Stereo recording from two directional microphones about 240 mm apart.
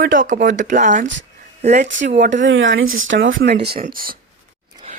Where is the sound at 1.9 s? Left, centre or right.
Right.